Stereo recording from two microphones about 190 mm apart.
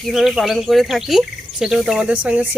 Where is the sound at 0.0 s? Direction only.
Centre (ahead or behind).